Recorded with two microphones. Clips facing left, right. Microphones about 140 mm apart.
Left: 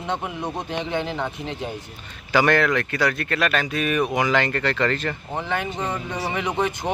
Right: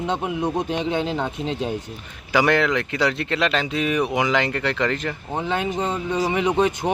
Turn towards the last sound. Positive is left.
turn(degrees=-15)  # may be behind; listen again after turning